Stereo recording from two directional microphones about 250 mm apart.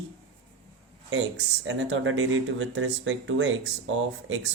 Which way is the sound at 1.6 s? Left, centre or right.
Right.